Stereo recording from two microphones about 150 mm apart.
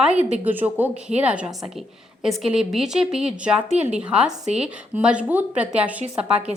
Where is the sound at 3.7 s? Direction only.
45° right (ahead or behind).